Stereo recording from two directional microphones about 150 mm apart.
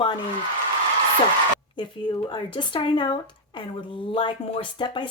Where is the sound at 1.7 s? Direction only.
30° left (ahead or behind).